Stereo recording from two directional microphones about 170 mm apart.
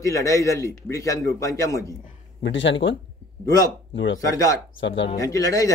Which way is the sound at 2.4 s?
90° left.